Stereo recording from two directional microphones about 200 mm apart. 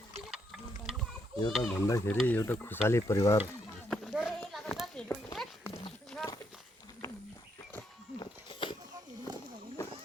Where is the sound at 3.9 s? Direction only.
Centre (ahead or behind).